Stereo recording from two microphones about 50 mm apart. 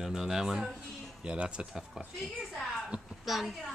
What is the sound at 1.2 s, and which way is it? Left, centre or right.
Speech, right.